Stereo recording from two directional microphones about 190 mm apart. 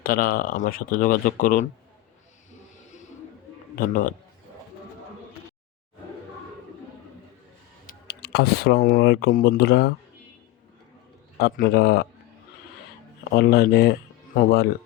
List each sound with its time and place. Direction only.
0.0 s speech: 50° left (ahead or behind)
3.8 s speech: 45° left (ahead or behind)
8.0 s speech: 60° left (ahead or behind)
11.3 s a man's voice: 50° left (ahead or behind)
13.3 s a man's voice: 60° left (ahead or behind)